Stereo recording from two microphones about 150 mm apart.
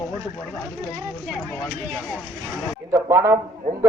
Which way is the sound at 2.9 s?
20° right (ahead or behind).